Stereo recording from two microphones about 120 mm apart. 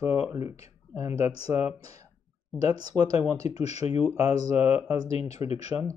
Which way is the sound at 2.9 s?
60° left (ahead or behind).